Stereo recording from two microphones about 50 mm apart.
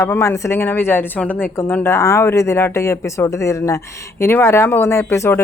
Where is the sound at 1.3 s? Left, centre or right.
Left.